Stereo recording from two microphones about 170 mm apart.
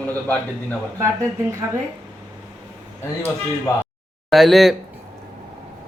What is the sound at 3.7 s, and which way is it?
Speech, 15° left (ahead or behind).